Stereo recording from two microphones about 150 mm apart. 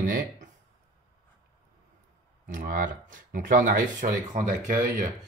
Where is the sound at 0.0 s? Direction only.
60° right (ahead or behind).